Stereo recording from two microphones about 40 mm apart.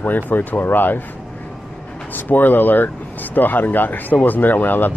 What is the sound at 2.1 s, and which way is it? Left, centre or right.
Speech, left.